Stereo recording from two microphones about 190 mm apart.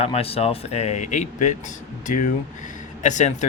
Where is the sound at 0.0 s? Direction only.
30° left (ahead or behind).